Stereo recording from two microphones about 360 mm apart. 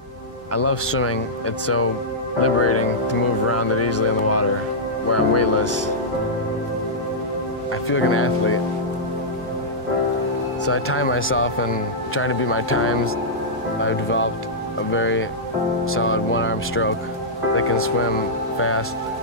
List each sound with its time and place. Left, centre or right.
0.5 s speech: left
2.4 s speech: left
7.9 s speech: left
10.6 s speech: left